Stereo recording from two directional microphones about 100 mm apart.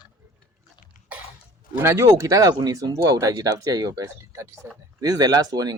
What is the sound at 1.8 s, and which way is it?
Speech, 30° right (ahead or behind).